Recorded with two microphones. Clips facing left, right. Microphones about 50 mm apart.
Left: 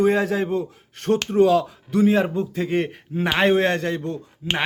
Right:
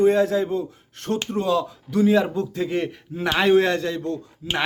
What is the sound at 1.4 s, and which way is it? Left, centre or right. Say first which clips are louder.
Speech: left 6 dB; left.